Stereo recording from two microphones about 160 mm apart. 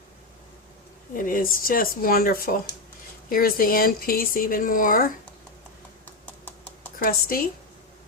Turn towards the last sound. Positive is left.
turn(degrees=70)  # may be behind; listen again after turning